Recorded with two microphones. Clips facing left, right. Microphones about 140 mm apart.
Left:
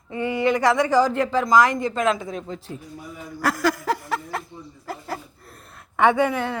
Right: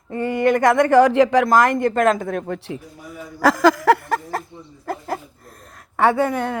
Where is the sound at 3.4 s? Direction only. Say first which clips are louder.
Right 7 dB; 90° right.